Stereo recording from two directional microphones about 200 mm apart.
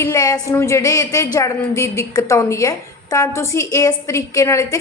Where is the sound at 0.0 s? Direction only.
15° left (ahead or behind).